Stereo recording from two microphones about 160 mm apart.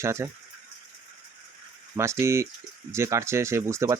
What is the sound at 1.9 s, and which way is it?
Speech, 15° right (ahead or behind).